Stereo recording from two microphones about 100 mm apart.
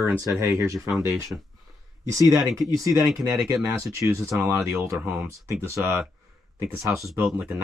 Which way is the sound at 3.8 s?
30° right (ahead or behind).